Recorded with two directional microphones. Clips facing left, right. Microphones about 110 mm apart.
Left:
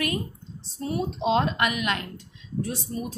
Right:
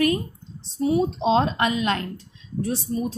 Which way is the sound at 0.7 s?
15° right (ahead or behind).